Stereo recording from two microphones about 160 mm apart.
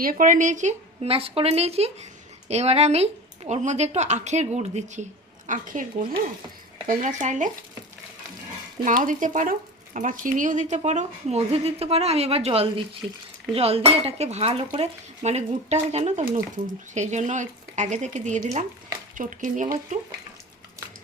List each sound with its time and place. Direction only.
0.0 s speech: 60° right (ahead or behind)
6.8 s speech: 50° right (ahead or behind)
9.0 s speech: 55° right (ahead or behind); by 12.8 s 35° right (ahead or behind)
13.5 s dishes: 40° right (ahead or behind)
16.9 s speech: 45° right (ahead or behind)